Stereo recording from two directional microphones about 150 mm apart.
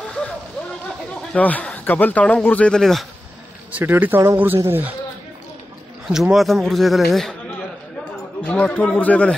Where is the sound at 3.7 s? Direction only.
10° right (ahead or behind).